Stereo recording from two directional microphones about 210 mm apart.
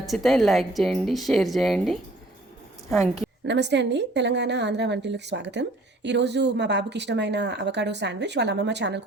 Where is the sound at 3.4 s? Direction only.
55° right (ahead or behind).